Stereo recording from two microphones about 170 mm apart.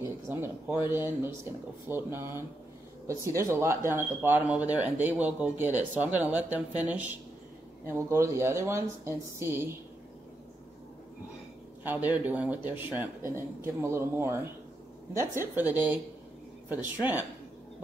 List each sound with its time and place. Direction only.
0.0 s a sound: 15° right (ahead or behind)
0.8 s speech: 15° right (ahead or behind)
11.8 s speech: 10° right (ahead or behind)